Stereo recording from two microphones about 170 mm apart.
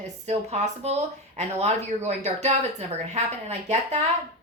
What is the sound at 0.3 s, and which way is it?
A woman's voice, 40° right (ahead or behind).